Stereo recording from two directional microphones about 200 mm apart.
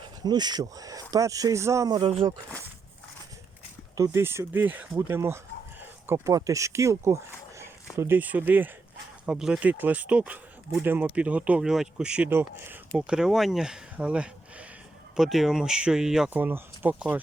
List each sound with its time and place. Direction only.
0.0 s speech: 20° right (ahead or behind)
3.9 s speech: 15° right (ahead or behind)